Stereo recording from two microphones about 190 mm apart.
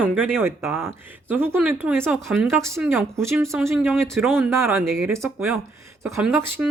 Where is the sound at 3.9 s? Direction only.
Centre (ahead or behind).